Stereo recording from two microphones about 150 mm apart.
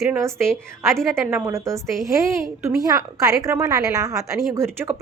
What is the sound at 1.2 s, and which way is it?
A woman's voice, 15° right (ahead or behind).